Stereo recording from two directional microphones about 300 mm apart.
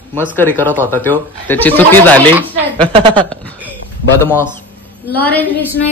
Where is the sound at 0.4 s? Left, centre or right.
Centre.